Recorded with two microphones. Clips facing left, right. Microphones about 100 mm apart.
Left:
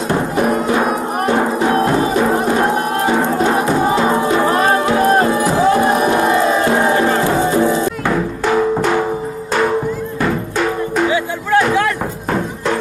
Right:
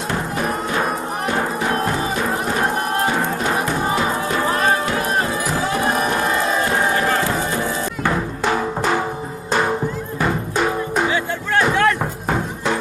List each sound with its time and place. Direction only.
3.5 s music: 25° left (ahead or behind)
8.1 s music: centre (ahead or behind)
11.1 s music: 5° left (ahead or behind)